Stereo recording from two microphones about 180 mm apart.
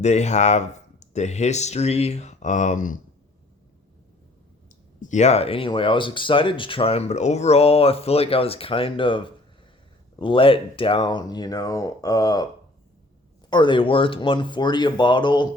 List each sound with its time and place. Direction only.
0.0 s speech: 40° left (ahead or behind)
4.9 s speech: 40° left (ahead or behind); by 12.5 s 20° left (ahead or behind)
13.5 s speech: 25° left (ahead or behind)